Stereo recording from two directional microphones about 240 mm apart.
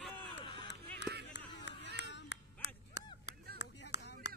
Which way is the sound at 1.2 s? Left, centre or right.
Left.